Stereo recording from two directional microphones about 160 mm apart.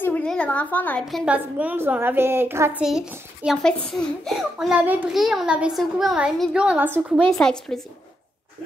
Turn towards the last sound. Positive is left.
turn(degrees=5)  # may be behind; listen again after turning